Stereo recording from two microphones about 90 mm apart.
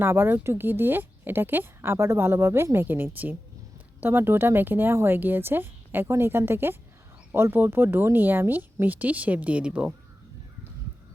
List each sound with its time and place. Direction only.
0.0 s a woman's voice: 25° right (ahead or behind)